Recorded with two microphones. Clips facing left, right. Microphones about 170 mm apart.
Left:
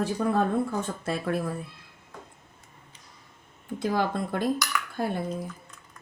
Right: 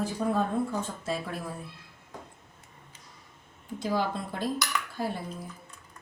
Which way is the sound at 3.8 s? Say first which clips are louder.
Left 3 dB; 55° left (ahead or behind).